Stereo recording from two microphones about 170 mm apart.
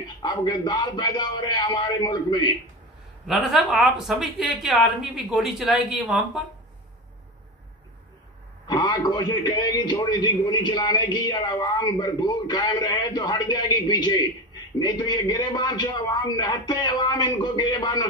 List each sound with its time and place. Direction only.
0.2 s a man's voice: 25° left (ahead or behind)
3.3 s speech: centre (ahead or behind)
8.6 s a man's voice: 25° left (ahead or behind)